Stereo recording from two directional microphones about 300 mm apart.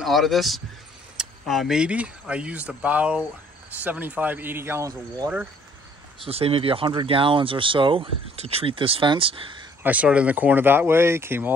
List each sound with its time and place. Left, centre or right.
0.0 s speech: centre
6.2 s speech: centre
9.8 s speech: centre